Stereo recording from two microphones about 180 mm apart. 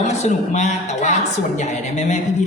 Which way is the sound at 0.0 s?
40° left (ahead or behind).